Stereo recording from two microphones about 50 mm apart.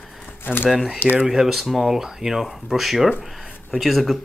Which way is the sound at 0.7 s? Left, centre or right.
Centre.